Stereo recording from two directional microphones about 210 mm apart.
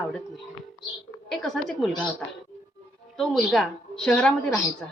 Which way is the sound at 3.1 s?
Centre (ahead or behind).